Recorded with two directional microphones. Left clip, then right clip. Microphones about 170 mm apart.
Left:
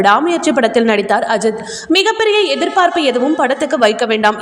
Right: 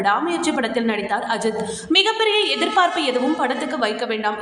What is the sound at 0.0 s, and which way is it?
A woman's voice, 40° left (ahead or behind).